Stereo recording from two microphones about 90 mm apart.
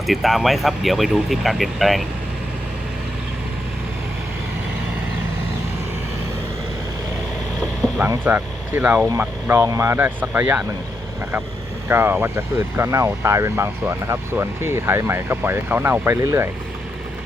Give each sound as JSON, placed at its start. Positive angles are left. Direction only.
{"t": 0.1, "sound": "speech", "side_deg": 0}
{"t": 8.2, "sound": "speech", "side_deg": -20}
{"t": 11.9, "sound": "speech", "side_deg": -25}
{"t": 16.2, "sound": "speech", "side_deg": -35}